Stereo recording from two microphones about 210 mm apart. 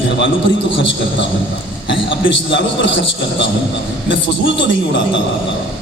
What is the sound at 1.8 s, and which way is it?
A man's voice, 60° left (ahead or behind).